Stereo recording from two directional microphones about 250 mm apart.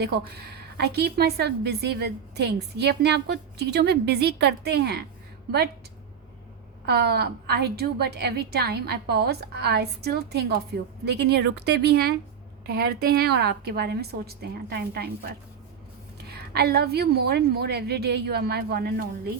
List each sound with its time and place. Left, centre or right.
0.0 s a woman's voice: right
6.8 s a woman's voice: right